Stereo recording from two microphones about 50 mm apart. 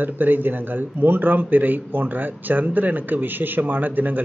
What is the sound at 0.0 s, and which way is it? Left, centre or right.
Speech, right.